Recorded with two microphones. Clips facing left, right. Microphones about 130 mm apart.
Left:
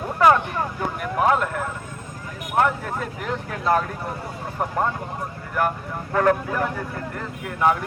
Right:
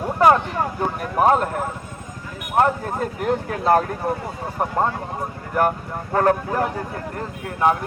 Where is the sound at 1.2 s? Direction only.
35° right (ahead or behind).